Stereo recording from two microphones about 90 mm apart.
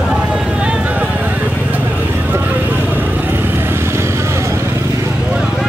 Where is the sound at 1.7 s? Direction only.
20° right (ahead or behind).